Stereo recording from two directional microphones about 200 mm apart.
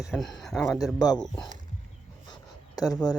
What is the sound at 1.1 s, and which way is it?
Speech, 5° left (ahead or behind).